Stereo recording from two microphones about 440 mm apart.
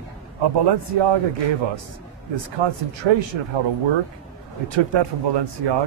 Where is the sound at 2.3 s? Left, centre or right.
Right.